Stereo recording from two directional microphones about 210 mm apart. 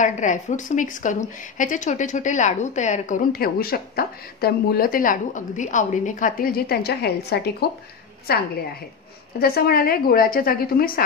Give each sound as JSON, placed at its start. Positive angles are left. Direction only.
{"t": 0.0, "sound": "a woman's voice", "side_deg": 35}